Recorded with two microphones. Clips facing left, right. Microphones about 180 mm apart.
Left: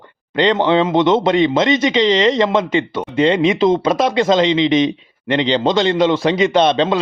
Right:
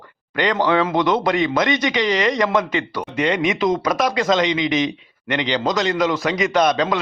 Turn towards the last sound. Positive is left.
turn(degrees=25)  # may be behind; listen again after turning